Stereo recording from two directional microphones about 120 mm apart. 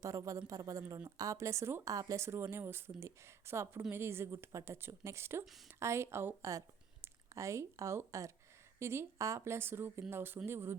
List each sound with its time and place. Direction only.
0.0 s a woman's voice: 25° right (ahead or behind)